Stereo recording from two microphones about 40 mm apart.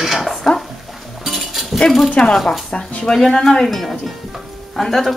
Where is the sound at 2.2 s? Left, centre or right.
Centre.